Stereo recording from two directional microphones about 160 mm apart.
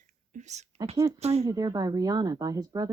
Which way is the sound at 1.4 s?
20° right (ahead or behind).